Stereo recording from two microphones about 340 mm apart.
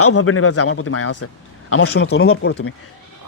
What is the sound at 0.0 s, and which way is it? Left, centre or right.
Speech, left.